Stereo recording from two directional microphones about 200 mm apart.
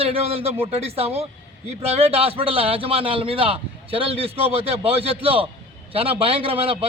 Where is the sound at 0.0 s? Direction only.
30° right (ahead or behind).